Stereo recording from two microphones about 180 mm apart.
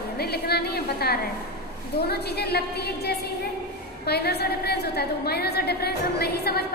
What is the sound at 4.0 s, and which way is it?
A woman's voice, 60° left (ahead or behind).